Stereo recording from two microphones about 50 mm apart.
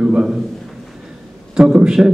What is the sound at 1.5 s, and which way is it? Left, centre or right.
Speech, centre.